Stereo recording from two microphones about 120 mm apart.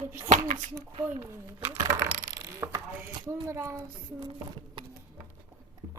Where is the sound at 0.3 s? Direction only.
80° right.